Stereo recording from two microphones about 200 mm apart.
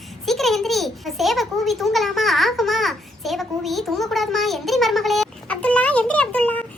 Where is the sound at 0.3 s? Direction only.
Centre (ahead or behind).